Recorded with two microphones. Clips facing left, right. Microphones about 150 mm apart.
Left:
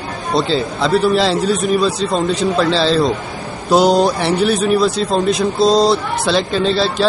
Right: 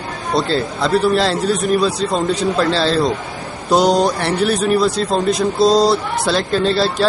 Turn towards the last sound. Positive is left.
turn(degrees=0)  # may be behind; listen again after turning